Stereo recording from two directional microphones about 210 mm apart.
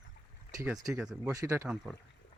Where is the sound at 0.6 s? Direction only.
15° right (ahead or behind).